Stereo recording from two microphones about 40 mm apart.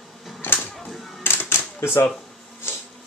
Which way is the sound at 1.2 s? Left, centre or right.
Left.